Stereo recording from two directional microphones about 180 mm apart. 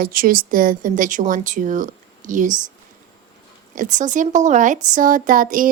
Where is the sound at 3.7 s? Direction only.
45° right (ahead or behind).